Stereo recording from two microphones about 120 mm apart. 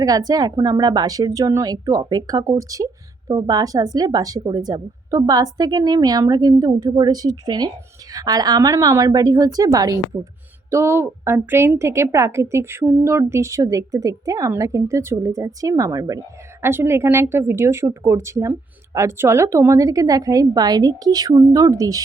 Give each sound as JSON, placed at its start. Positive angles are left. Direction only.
{"t": 0.0, "sound": "a woman's voice", "side_deg": -30}
{"t": 10.7, "sound": "a woman's voice", "side_deg": -20}
{"t": 16.6, "sound": "a woman's voice", "side_deg": -20}